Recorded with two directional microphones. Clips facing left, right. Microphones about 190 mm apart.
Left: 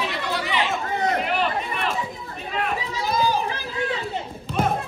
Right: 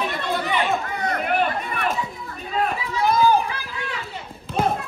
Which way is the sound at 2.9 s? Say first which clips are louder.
Right 6 dB; 55° right (ahead or behind).